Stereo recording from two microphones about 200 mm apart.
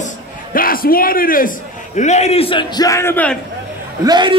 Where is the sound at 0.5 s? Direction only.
45° left (ahead or behind).